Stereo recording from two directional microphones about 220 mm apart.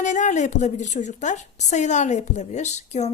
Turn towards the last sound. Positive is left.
turn(degrees=30)  # may be behind; listen again after turning